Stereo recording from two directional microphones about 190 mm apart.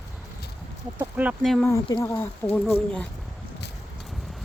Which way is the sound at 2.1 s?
10° left (ahead or behind).